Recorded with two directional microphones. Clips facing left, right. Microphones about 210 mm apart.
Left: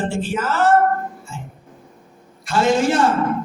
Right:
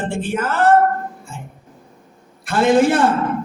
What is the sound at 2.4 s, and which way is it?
Speech, 55° right (ahead or behind).